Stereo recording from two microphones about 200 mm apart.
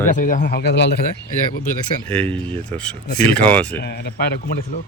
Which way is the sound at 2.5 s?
5° left (ahead or behind).